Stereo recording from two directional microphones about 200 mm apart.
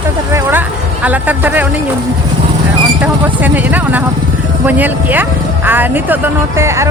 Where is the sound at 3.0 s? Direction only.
10° right (ahead or behind).